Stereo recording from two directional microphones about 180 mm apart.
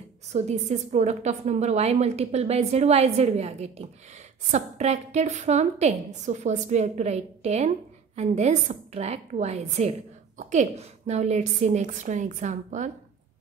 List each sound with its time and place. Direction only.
0.3 s a woman's voice: 40° right (ahead or behind)